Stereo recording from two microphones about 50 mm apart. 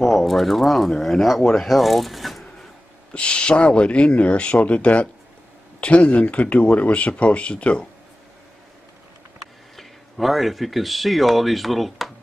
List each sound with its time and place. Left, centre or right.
0.0 s speech: centre
3.1 s speech: left
9.8 s speech: centre